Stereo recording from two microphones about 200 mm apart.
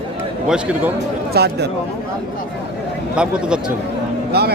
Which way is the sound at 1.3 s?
55° right (ahead or behind).